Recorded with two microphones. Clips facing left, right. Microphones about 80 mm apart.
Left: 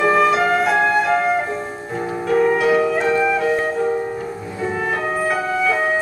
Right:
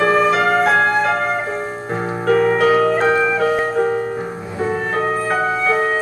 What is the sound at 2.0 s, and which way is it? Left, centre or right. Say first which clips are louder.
Music: right 2 dB; right.